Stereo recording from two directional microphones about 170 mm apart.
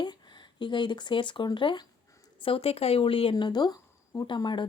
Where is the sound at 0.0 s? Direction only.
25° left (ahead or behind).